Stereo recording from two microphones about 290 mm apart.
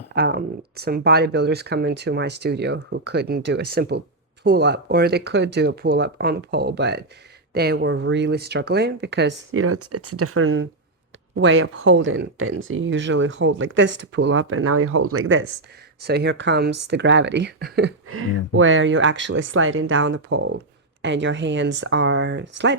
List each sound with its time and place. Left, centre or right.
0.1 s speech: right
16.0 s speech: right
18.1 s speech: right